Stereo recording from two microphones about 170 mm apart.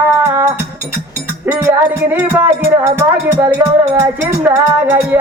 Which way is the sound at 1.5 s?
15° right (ahead or behind).